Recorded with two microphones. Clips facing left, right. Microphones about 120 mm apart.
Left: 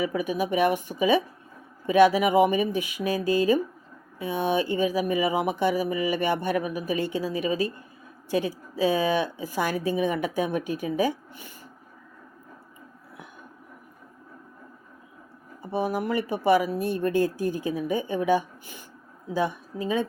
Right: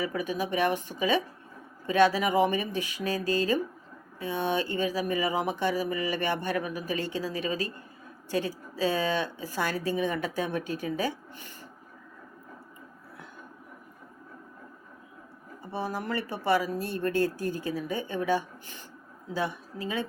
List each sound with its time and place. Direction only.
0.0 s speech: 15° left (ahead or behind)
15.6 s speech: 15° left (ahead or behind)